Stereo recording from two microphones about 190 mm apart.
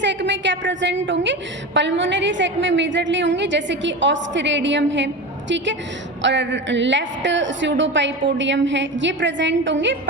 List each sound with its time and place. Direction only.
0.0 s a woman's voice: 70° right (ahead or behind)